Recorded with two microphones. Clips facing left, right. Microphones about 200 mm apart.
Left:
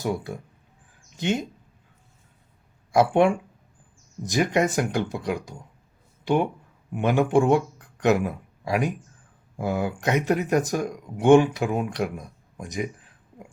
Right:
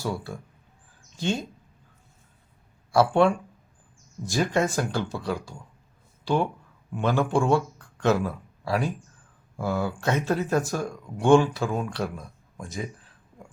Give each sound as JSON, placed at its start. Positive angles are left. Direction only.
{"t": 0.0, "sound": "speech", "side_deg": 20}
{"t": 2.9, "sound": "a man's voice", "side_deg": 15}